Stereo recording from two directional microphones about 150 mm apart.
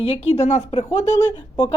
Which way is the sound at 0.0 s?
40° left (ahead or behind).